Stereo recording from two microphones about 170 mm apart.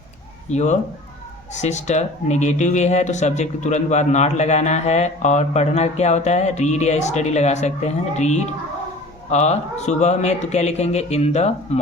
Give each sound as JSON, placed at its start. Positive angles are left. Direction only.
{"t": 0.5, "sound": "speech", "side_deg": 45}